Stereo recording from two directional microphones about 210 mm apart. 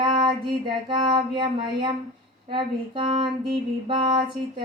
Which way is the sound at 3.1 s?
25° right (ahead or behind).